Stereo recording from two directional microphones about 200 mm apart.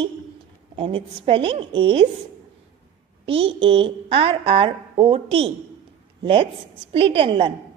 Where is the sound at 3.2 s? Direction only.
30° right (ahead or behind).